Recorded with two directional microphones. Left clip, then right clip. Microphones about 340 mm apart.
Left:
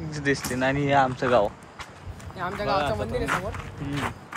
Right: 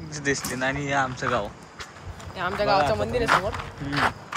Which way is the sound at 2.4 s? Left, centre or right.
Centre.